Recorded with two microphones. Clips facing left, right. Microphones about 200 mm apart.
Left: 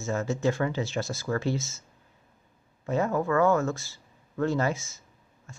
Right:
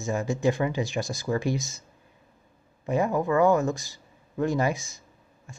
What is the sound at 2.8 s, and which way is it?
Speech, 15° right (ahead or behind).